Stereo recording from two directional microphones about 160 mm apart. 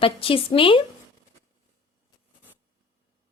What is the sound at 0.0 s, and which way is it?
Speech, 35° left (ahead or behind).